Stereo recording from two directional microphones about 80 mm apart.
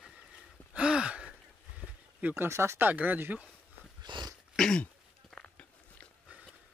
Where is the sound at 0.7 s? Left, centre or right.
Centre.